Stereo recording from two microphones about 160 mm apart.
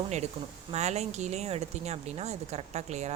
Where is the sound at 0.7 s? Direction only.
45° right (ahead or behind).